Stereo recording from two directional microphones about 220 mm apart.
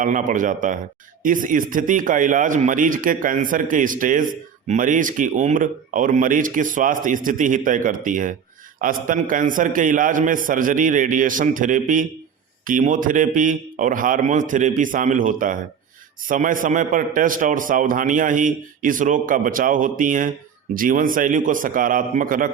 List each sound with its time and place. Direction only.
0.0 s a man's voice: 35° right (ahead or behind)